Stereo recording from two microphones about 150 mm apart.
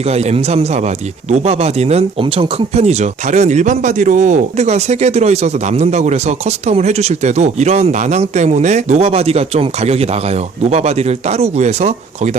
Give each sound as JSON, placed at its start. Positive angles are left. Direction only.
{"t": 0.1, "sound": "speech", "side_deg": -45}